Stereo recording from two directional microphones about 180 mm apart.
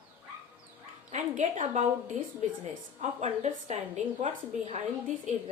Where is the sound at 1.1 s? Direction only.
40° right (ahead or behind).